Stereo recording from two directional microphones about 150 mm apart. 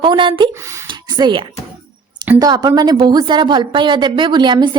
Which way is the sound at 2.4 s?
25° right (ahead or behind).